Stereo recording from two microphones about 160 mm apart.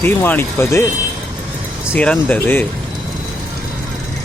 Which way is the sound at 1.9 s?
10° left (ahead or behind).